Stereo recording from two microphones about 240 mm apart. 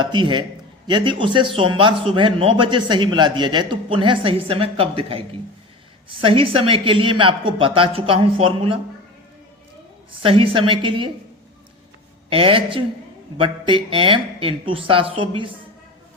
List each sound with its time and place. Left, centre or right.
0.0 s a man's voice: centre
10.2 s a man's voice: right
12.3 s a man's voice: right